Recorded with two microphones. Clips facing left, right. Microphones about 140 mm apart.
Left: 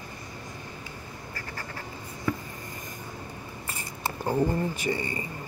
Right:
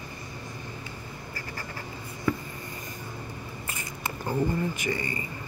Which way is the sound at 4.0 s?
30° left (ahead or behind).